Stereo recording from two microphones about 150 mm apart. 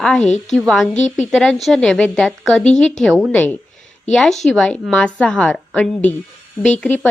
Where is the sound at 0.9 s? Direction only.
50° left (ahead or behind).